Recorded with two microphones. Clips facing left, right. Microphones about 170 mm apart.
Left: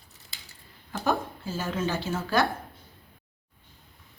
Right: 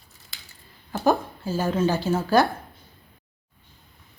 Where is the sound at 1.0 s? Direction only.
35° right (ahead or behind).